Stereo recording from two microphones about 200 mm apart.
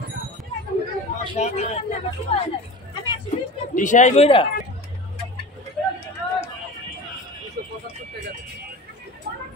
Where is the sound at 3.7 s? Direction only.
40° left (ahead or behind).